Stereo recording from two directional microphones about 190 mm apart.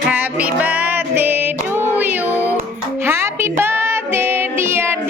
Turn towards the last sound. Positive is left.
turn(degrees=-10)  # may be behind; listen again after turning